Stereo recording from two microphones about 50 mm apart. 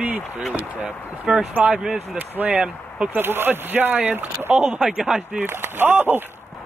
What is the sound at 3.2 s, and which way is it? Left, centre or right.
Speech, right.